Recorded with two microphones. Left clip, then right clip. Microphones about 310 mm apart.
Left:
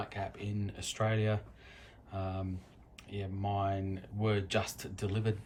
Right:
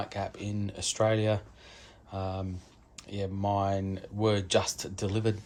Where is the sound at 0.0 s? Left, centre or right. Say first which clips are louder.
Right 5 dB; right.